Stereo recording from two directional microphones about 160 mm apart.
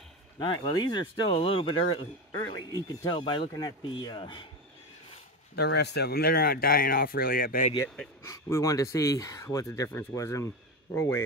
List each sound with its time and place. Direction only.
0.4 s speech: 30° left (ahead or behind)
5.6 s speech: 90° left; by 7.7 s 60° left (ahead or behind)
8.2 s speech: 20° left (ahead or behind)